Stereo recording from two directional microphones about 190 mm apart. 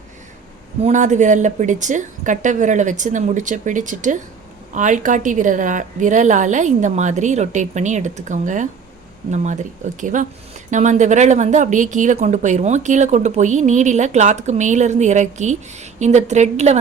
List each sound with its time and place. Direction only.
0.8 s a woman's voice: 35° right (ahead or behind)